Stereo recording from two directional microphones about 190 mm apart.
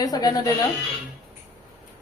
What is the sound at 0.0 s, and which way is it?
Speech, 20° left (ahead or behind).